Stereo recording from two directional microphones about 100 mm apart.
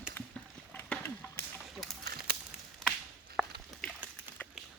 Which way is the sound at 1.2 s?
30° left (ahead or behind).